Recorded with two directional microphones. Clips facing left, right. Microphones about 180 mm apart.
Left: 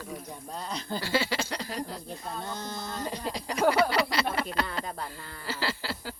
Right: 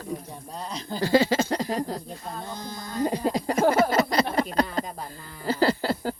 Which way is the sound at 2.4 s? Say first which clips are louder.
Even; 35° right (ahead or behind).